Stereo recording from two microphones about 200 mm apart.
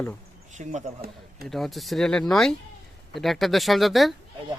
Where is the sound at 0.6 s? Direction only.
35° right (ahead or behind).